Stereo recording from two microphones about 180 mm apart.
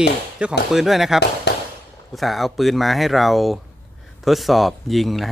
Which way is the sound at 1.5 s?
70° left (ahead or behind).